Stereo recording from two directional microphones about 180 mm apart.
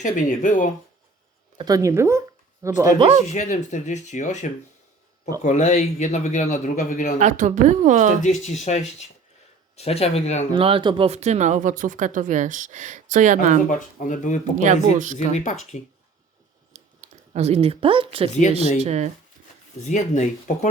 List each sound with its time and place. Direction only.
0.0 s speech: 45° left (ahead or behind)
1.5 s speech: 20° right (ahead or behind)
3.2 s speech: 40° left (ahead or behind)
7.2 s speech: 40° right (ahead or behind)
8.2 s speech: 40° left (ahead or behind)
10.5 s speech: 30° right (ahead or behind)
13.7 s speech: 45° left (ahead or behind)
14.6 s speech: 45° right (ahead or behind)
15.1 s speech: 40° left (ahead or behind)
16.7 s a sound: 40° right (ahead or behind)
18.8 s speech: 40° right (ahead or behind)
19.8 s speech: 40° left (ahead or behind)